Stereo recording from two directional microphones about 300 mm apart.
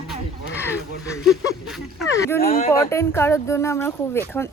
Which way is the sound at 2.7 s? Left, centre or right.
Centre.